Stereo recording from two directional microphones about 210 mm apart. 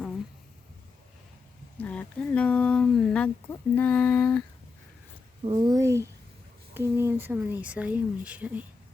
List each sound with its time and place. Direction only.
1.8 s speech: 5° left (ahead or behind)
5.5 s speech: 20° right (ahead or behind)